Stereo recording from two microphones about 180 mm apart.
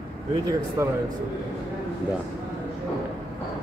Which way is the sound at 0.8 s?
15° right (ahead or behind).